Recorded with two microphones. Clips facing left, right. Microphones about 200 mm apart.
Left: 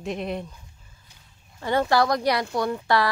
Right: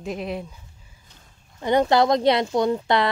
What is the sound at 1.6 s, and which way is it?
Speech, 20° right (ahead or behind).